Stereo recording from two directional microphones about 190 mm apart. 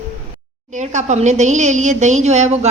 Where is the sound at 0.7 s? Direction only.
40° right (ahead or behind).